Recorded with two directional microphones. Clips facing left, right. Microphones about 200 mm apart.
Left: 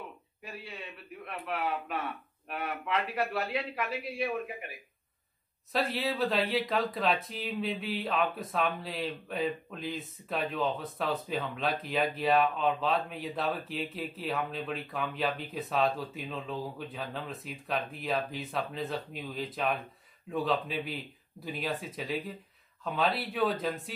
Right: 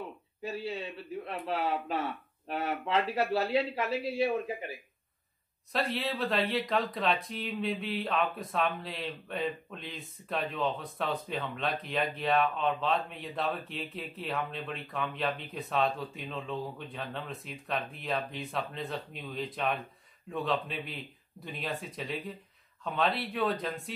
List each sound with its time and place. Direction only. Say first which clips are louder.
0.4 s a man's voice: right 8 dB; 30° right (ahead or behind)
5.7 s speech: left 1 dB; centre (ahead or behind)